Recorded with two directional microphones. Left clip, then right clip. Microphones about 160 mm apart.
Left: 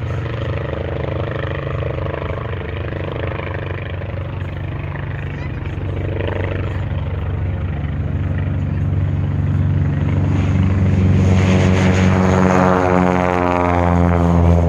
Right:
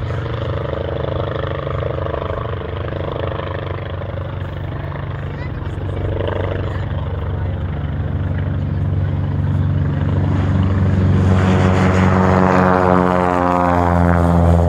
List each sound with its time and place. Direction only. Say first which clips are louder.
0.7 s vehicle: right 3 dB; centre (ahead or behind)
6.1 s vehicle: right 2 dB; centre (ahead or behind)
10.3 s vehicle: even; 15° right (ahead or behind); by 14.6 s 55° right (ahead or behind)